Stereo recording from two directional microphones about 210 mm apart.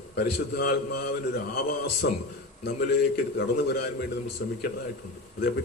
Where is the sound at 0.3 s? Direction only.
50° left (ahead or behind).